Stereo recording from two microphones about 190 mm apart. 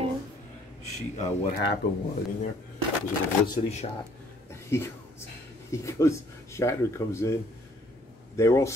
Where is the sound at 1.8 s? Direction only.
60° left (ahead or behind).